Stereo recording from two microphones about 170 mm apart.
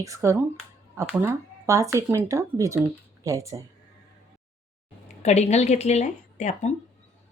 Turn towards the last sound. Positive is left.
turn(degrees=45)  # may be behind; listen again after turning